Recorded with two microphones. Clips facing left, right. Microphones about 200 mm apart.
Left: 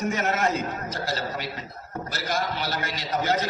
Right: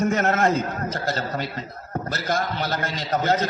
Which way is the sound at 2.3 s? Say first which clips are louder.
Right 3 dB; 50° right (ahead or behind).